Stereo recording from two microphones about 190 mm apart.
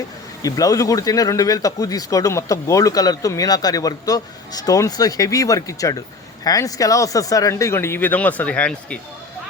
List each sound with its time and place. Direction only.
0.4 s speech: 20° left (ahead or behind)